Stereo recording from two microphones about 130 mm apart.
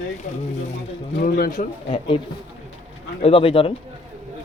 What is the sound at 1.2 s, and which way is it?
Speech, 90° left.